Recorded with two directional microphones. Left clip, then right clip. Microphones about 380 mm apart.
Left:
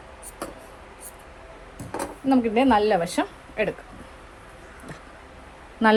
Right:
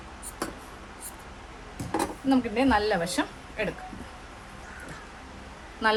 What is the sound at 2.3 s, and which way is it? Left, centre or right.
Speech, centre.